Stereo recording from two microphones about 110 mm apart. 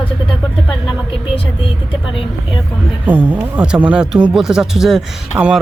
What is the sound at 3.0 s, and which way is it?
Speech, 15° right (ahead or behind).